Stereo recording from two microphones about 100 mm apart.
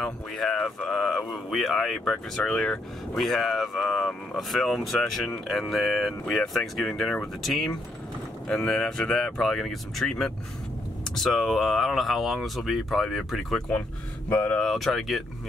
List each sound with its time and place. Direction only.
0.0 s speech: 5° left (ahead or behind)
14.3 s speech: 15° left (ahead or behind)
14.6 s speech: centre (ahead or behind)